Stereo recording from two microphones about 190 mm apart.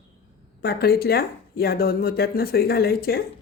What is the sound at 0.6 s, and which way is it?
Speech, 55° left (ahead or behind).